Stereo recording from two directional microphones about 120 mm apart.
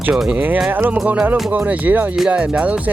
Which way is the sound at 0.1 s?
5° right (ahead or behind).